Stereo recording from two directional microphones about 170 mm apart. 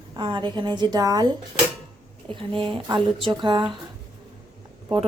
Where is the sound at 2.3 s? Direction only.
30° right (ahead or behind).